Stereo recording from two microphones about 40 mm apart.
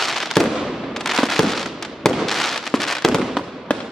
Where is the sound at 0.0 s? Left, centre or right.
Centre.